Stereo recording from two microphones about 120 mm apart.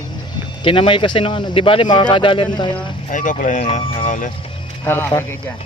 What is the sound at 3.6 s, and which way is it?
Speech, 50° left (ahead or behind).